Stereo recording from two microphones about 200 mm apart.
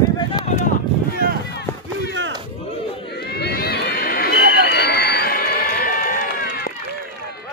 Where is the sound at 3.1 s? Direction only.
55° left (ahead or behind).